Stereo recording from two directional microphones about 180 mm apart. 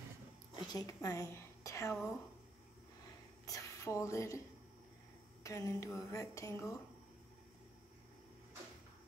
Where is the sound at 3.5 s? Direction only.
15° left (ahead or behind).